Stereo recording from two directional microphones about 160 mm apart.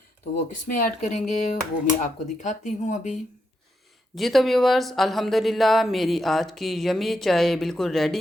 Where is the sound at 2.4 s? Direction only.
50° left (ahead or behind).